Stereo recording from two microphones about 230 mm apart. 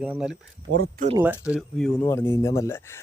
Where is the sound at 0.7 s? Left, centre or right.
Right.